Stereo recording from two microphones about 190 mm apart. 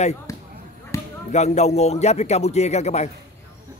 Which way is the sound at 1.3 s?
35° left (ahead or behind).